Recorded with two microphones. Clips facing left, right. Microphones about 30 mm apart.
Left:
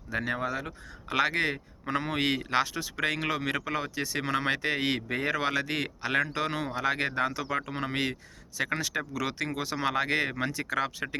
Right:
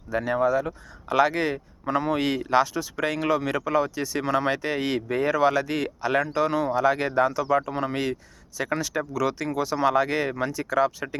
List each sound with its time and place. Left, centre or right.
0.1 s speech: left